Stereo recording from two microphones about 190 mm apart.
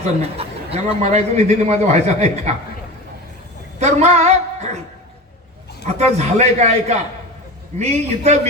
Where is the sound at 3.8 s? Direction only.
35° right (ahead or behind).